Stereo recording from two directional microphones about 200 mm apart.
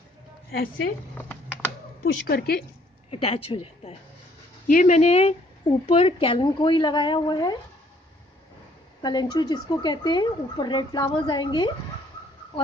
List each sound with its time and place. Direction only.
1.1 s typing: 10° left (ahead or behind)
2.2 s a woman's voice: 50° left (ahead or behind)
3.1 s a woman's voice: 30° left (ahead or behind)
4.6 s speech: 40° left (ahead or behind); by 7.5 s 20° left (ahead or behind)
9.0 s speech: 20° left (ahead or behind)